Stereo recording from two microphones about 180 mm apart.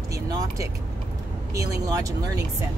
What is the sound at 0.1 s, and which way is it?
Speech, 20° right (ahead or behind).